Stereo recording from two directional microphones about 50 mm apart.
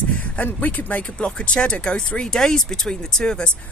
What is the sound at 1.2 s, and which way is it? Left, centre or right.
Speech, left.